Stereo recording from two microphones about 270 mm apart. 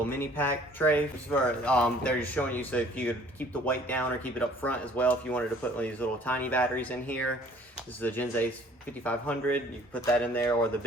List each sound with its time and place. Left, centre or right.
0.2 s speech: centre